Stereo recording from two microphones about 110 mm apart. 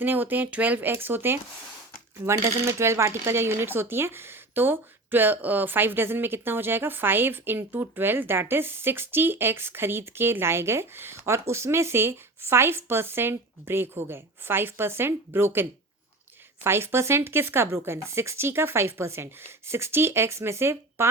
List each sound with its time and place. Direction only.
0.0 s speech: 15° right (ahead or behind)
16.6 s speech: 20° right (ahead or behind)